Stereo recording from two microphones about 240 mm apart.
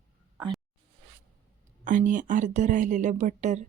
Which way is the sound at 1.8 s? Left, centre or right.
Right.